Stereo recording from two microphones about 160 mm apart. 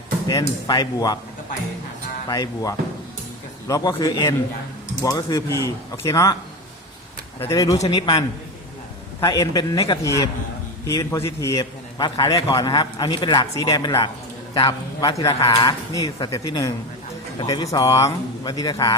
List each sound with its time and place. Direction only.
0.3 s a man's voice: 25° left (ahead or behind)
2.3 s a man's voice: 20° left (ahead or behind)
7.4 s a man's voice: 20° left (ahead or behind)
7.8 s a man's voice: 30° left (ahead or behind)
9.2 s a man's voice: 25° left (ahead or behind)